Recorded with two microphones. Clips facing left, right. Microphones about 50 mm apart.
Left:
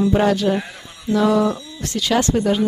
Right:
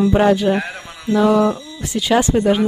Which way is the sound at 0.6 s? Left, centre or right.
Right.